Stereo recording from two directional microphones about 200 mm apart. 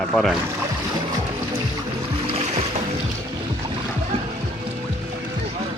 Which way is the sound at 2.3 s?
30° right (ahead or behind).